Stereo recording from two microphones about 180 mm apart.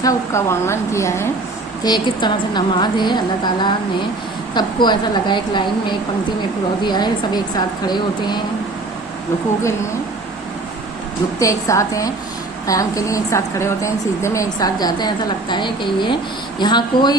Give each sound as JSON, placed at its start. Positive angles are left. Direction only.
{"t": 0.0, "sound": "a woman's voice", "side_deg": 15}
{"t": 6.8, "sound": "a woman's voice", "side_deg": 25}
{"t": 11.3, "sound": "a woman's voice", "side_deg": 15}